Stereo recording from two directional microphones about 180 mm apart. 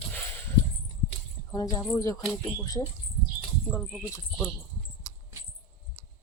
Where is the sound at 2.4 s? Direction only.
20° left (ahead or behind).